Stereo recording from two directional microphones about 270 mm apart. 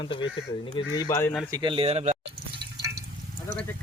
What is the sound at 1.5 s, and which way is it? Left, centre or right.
Speech, centre.